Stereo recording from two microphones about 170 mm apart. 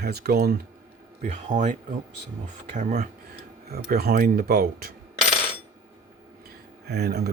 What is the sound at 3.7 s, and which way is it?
Speech, 65° right (ahead or behind).